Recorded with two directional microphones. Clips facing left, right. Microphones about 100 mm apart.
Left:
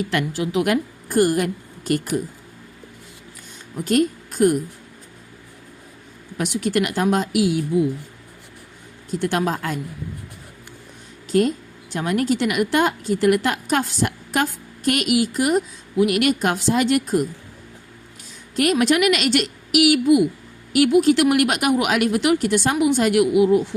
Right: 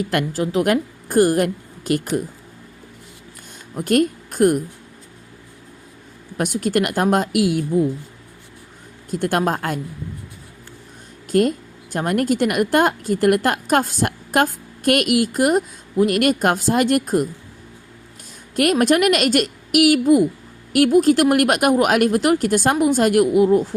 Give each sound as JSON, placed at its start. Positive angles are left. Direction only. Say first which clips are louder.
{"t": 0.0, "sound": "a woman's voice", "louder": "right 2 dB", "side_deg": -45}
{"t": 3.5, "sound": "speech", "louder": "right 2 dB", "side_deg": -50}
{"t": 6.3, "sound": "a woman's voice", "louder": "right 2 dB", "side_deg": -45}
{"t": 9.0, "sound": "a woman's voice", "louder": "right 2 dB", "side_deg": -50}
{"t": 11.3, "sound": "a woman's voice", "louder": "right 1 dB", "side_deg": -50}
{"t": 18.5, "sound": "a woman's voice", "louder": "right 2 dB", "side_deg": -50}